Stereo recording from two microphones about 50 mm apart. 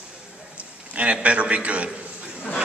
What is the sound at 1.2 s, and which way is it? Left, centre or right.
Speech, right.